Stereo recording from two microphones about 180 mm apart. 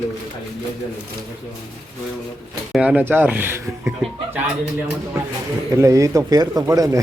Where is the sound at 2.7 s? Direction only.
5° right (ahead or behind).